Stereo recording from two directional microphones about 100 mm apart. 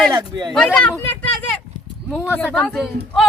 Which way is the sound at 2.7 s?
5° left (ahead or behind).